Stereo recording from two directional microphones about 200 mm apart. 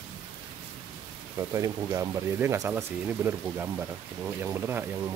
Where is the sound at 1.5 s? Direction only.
15° right (ahead or behind).